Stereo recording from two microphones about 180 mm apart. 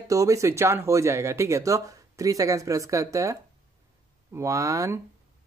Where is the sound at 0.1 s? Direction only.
20° right (ahead or behind).